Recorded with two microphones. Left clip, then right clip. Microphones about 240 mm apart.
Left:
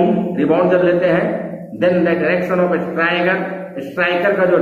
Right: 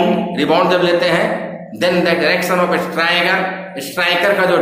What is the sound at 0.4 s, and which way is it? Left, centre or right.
A man's voice, right.